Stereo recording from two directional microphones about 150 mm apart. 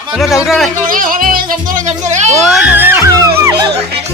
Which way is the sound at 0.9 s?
65° right (ahead or behind).